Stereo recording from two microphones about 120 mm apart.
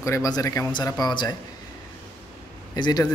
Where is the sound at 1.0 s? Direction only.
35° left (ahead or behind).